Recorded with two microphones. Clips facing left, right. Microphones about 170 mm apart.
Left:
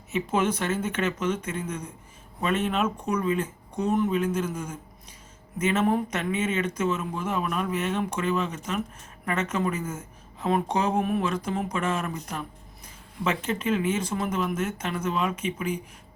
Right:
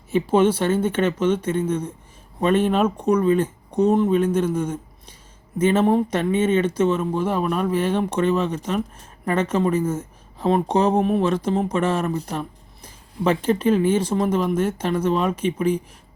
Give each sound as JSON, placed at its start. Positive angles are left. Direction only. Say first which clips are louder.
{"t": 0.1, "sound": "speech", "louder": "right 8 dB", "side_deg": -30}